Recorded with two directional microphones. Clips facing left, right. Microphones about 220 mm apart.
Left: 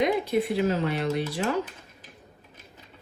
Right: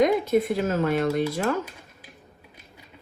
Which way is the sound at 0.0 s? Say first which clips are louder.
Right 4 dB; 45° right (ahead or behind).